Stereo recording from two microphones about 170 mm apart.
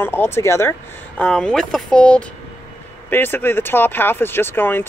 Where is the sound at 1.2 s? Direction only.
5° left (ahead or behind).